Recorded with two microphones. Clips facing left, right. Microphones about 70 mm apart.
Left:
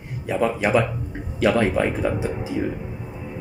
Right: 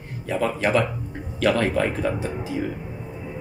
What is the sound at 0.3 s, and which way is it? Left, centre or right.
Speech, centre.